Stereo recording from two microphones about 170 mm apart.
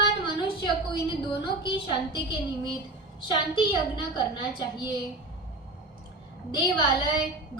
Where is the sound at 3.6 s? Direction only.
25° left (ahead or behind).